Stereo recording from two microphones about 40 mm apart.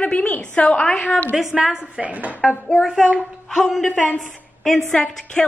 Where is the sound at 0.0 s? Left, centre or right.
Left.